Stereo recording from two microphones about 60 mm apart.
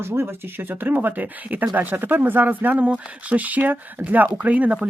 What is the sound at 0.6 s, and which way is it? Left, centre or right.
Speech, right.